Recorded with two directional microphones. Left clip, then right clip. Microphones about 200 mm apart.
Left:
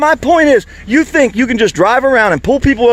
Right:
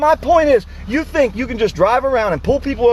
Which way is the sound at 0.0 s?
50° left (ahead or behind).